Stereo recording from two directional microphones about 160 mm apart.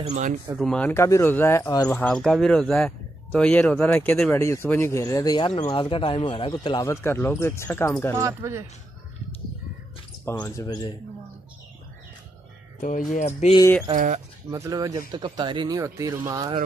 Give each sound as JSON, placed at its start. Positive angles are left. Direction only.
{"t": 0.1, "sound": "speech", "side_deg": -50}
{"t": 0.6, "sound": "speech", "side_deg": 5}
{"t": 2.0, "sound": "speech", "side_deg": 5}
{"t": 8.2, "sound": "speech", "side_deg": -20}
{"t": 10.3, "sound": "speech", "side_deg": 25}
{"t": 13.1, "sound": "a sound", "side_deg": 45}
{"t": 13.9, "sound": "speech", "side_deg": -50}
{"t": 14.5, "sound": "speech", "side_deg": -20}